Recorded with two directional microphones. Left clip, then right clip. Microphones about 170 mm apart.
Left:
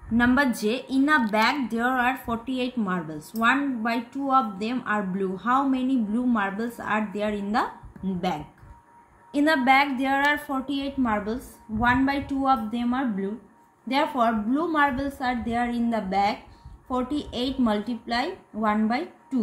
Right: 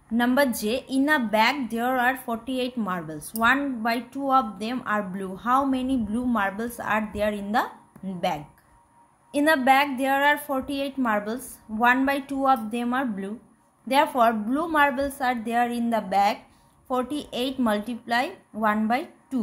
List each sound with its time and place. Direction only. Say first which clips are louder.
0.4 s a woman's voice: right 1 dB; 60° right (ahead or behind)
0.7 s a woman's voice: left 1 dB; 25° right (ahead or behind)
9.4 s a woman's voice: even; 35° right (ahead or behind)